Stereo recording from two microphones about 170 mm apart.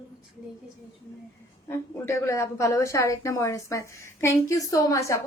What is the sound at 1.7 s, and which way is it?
A woman's voice, 15° left (ahead or behind).